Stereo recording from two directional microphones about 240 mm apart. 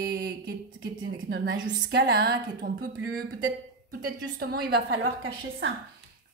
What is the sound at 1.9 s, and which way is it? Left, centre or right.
Speech, right.